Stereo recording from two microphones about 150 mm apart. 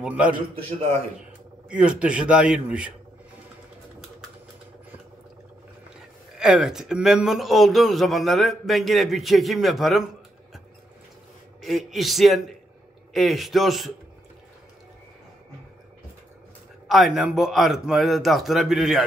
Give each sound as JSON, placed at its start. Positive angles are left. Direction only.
{"t": 0.0, "sound": "a man's voice", "side_deg": -10}
{"t": 0.7, "sound": "speech", "side_deg": -40}
{"t": 1.7, "sound": "a man's voice", "side_deg": -5}
{"t": 6.3, "sound": "speech", "side_deg": -5}
{"t": 11.6, "sound": "speech", "side_deg": 0}
{"t": 16.8, "sound": "speech", "side_deg": 0}